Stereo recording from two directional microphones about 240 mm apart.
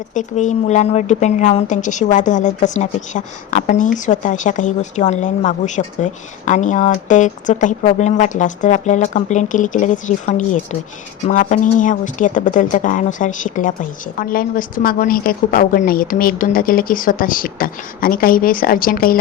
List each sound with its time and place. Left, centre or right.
0.1 s speech: left